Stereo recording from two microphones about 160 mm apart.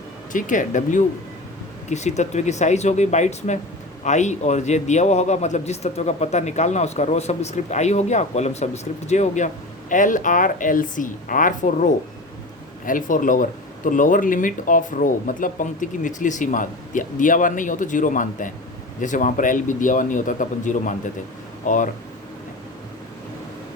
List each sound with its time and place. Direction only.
0.3 s a man's voice: 55° left (ahead or behind)